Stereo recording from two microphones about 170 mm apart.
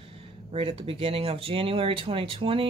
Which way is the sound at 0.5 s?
35° right (ahead or behind).